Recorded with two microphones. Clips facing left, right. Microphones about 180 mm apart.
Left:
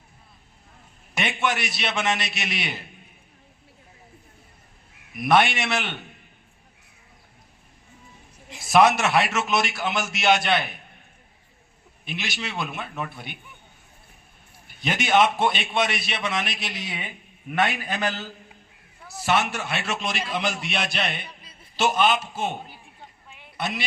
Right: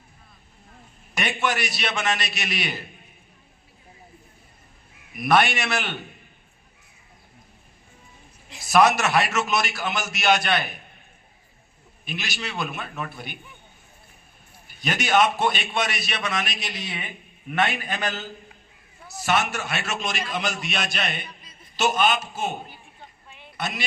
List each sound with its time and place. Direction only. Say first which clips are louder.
1.1 s a man's voice: even; 25° left (ahead or behind)
5.2 s a man's voice: even; 25° left (ahead or behind)
8.6 s a man's voice: left 1 dB; 25° left (ahead or behind)
12.0 s a man's voice: left 1 dB; 25° left (ahead or behind)
14.8 s a man's voice: left 1 dB; 25° left (ahead or behind)
16.7 s a man's voice: even; 15° left (ahead or behind)
19.2 s a man's voice: even; 30° left (ahead or behind)